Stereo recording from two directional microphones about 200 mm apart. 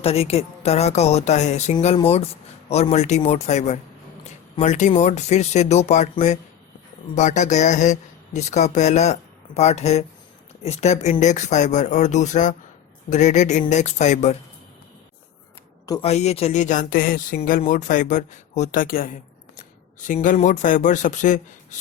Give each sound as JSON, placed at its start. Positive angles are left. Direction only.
{"t": 0.0, "sound": "speech", "side_deg": 30}
{"t": 15.9, "sound": "speech", "side_deg": 30}